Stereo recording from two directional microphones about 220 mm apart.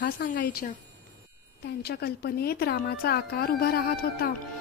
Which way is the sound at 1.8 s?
45° left (ahead or behind).